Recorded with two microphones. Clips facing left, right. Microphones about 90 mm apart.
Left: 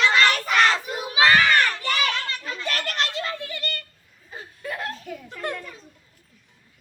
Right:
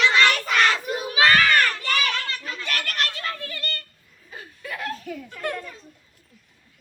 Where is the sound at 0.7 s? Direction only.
20° left (ahead or behind).